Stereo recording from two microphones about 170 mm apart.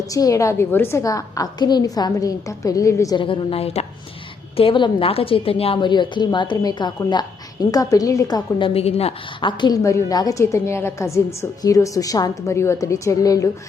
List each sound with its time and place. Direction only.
0.1 s a woman's voice: 20° left (ahead or behind)